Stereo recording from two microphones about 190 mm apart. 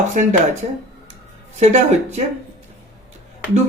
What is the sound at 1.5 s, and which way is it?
Speech, 35° right (ahead or behind).